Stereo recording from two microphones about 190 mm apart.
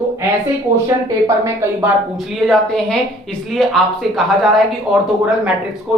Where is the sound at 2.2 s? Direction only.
Centre (ahead or behind).